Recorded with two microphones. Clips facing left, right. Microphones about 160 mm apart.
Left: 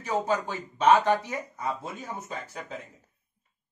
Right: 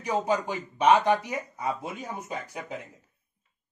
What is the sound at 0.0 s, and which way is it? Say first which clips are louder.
Speech: right 1 dB; 15° right (ahead or behind).